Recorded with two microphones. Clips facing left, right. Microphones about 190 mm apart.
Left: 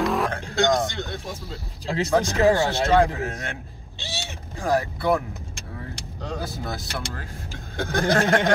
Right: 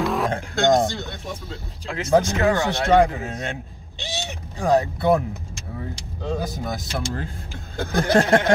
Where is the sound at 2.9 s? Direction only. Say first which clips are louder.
Right 4 dB; 15° right (ahead or behind).